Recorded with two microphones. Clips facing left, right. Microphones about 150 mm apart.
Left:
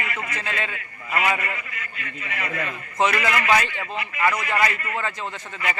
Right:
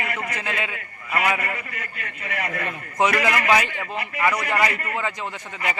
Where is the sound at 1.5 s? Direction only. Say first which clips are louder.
Right 2 dB; 40° right (ahead or behind).